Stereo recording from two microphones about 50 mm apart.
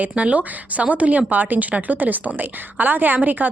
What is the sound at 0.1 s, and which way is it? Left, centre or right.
A woman's voice, right.